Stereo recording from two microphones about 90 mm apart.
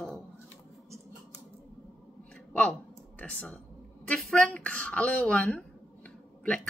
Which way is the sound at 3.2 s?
15° left (ahead or behind).